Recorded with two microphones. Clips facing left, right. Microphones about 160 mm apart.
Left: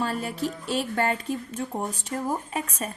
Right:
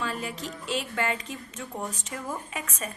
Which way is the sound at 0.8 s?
35° left (ahead or behind).